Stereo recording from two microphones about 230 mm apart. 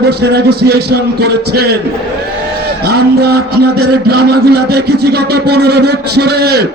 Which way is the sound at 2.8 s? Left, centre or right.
Right.